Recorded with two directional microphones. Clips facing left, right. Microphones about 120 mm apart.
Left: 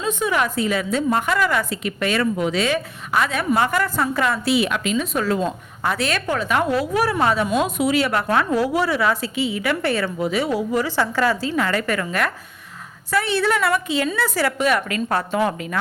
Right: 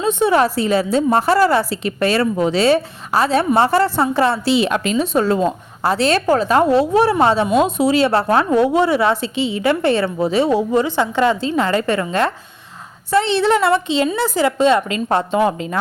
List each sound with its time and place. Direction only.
0.0 s a woman's voice: 30° right (ahead or behind)